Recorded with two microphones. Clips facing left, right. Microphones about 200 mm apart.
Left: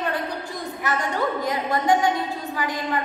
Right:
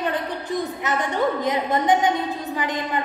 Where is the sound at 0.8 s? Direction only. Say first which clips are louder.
Right 1 dB; 20° right (ahead or behind).